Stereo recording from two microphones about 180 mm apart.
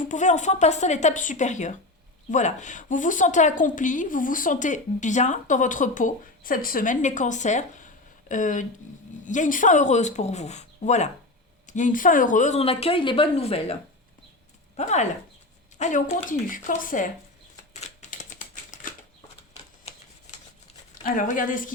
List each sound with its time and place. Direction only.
0.1 s a woman's voice: 40° left (ahead or behind)
14.8 s a woman's voice: 40° left (ahead or behind)
17.7 s typewriter: 40° left (ahead or behind)
19.9 s shuffling cards: 35° left (ahead or behind)
21.0 s a woman's voice: 45° left (ahead or behind)